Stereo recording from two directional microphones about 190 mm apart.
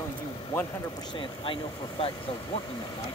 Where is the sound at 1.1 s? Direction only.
25° left (ahead or behind).